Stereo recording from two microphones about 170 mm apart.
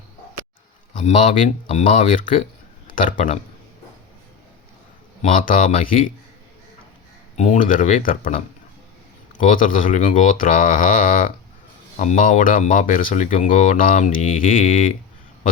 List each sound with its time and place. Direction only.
0.9 s speech: 45° left (ahead or behind)
5.2 s speech: 50° left (ahead or behind)
7.3 s speech: 45° left (ahead or behind)
9.4 s speech: 50° left (ahead or behind)